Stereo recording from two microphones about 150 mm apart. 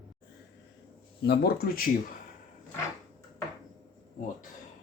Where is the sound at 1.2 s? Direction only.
90° left.